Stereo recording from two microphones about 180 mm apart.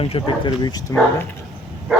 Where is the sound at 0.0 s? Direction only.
25° left (ahead or behind).